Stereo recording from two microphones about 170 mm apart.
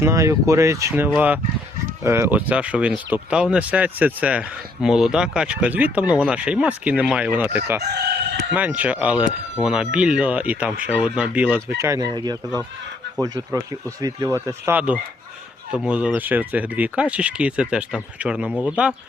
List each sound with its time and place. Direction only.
0.0 s speech: 15° right (ahead or behind)
11.8 s speech: 20° right (ahead or behind)